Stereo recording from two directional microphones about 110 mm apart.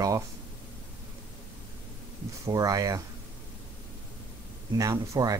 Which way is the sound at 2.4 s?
30° right (ahead or behind).